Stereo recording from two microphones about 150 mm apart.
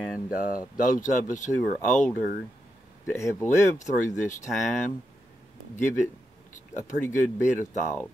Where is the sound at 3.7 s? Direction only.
55° left (ahead or behind).